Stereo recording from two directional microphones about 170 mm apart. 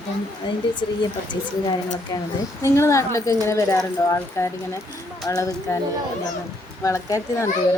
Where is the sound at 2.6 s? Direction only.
15° left (ahead or behind).